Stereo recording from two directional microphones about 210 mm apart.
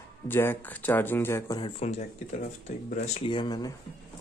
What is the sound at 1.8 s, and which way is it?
Speech, 30° left (ahead or behind).